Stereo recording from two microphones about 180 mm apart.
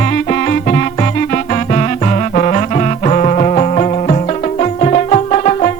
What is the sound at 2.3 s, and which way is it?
Music, 40° left (ahead or behind).